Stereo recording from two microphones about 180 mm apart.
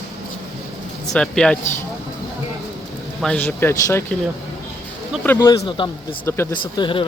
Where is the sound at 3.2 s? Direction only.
5° left (ahead or behind).